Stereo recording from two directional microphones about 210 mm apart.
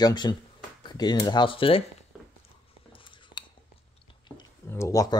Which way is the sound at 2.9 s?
25° left (ahead or behind).